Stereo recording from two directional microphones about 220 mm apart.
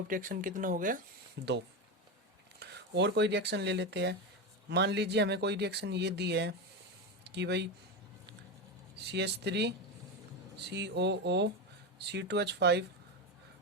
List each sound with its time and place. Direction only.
0.1 s speech: 40° right (ahead or behind)
1.4 s speech: 50° right (ahead or behind)
2.6 s speech: 50° right (ahead or behind)
9.1 s speech: 50° right (ahead or behind)